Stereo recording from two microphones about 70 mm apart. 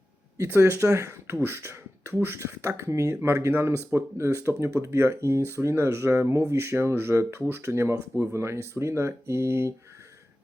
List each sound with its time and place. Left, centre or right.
0.3 s speech: right